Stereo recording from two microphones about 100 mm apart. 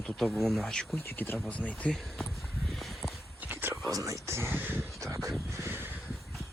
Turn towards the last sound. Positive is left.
turn(degrees=-20)  # may be behind; listen again after turning